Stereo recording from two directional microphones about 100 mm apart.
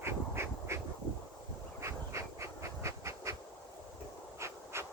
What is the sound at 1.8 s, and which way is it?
Rail transport, 30° right (ahead or behind).